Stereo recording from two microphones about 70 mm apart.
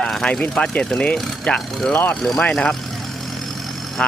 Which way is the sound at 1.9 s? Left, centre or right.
Left.